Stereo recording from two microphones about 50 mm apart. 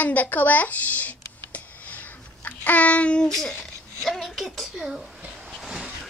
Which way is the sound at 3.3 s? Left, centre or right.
Centre.